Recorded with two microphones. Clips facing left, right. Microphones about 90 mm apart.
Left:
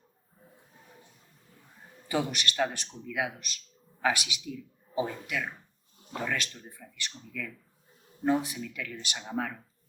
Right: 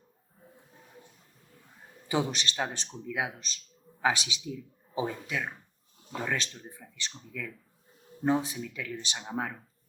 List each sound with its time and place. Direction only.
2.0 s a man's voice: 25° right (ahead or behind)